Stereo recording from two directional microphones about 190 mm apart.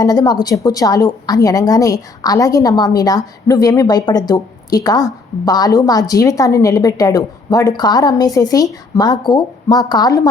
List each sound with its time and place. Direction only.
0.0 s a woman's voice: 20° left (ahead or behind)